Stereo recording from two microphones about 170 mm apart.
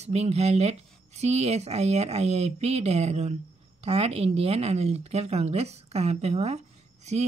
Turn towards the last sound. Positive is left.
turn(degrees=-40)  # may be behind; listen again after turning